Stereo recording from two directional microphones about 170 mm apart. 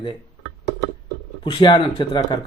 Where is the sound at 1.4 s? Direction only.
25° left (ahead or behind).